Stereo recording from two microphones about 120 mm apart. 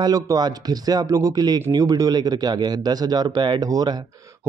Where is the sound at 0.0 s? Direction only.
30° right (ahead or behind).